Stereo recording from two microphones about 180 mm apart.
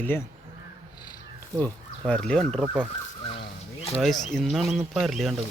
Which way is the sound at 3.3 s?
30° left (ahead or behind).